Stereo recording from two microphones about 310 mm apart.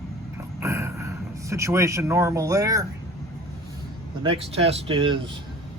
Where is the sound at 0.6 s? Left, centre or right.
Centre.